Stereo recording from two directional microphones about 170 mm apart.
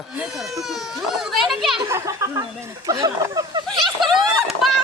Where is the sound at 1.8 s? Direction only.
20° right (ahead or behind).